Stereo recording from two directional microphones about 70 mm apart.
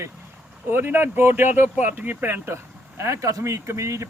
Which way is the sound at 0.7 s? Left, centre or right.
Right.